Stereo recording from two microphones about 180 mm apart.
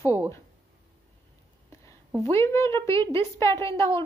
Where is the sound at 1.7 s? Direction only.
15° left (ahead or behind).